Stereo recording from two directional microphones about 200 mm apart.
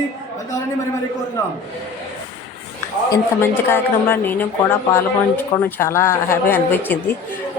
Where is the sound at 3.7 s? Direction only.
10° left (ahead or behind).